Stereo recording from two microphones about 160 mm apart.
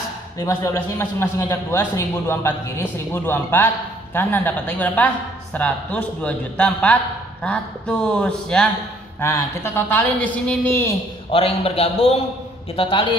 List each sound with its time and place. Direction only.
0.4 s a man's voice: 20° left (ahead or behind)
11.3 s a man's voice: 35° left (ahead or behind)